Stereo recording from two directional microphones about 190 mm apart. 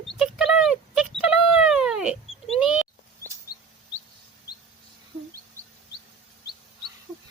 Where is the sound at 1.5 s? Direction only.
5° right (ahead or behind).